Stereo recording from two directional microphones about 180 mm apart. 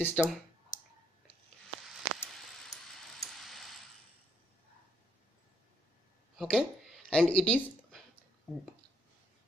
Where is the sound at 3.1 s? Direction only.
Centre (ahead or behind).